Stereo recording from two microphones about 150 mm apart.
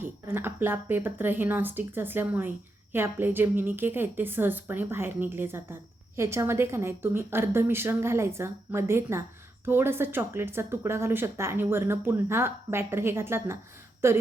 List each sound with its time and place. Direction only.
0.0 s a woman's voice: 15° right (ahead or behind)